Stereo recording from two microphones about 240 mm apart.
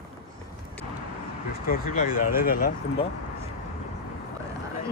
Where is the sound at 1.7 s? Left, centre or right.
Left.